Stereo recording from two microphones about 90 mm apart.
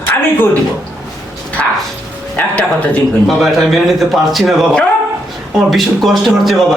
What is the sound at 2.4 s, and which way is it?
Speech, 15° left (ahead or behind).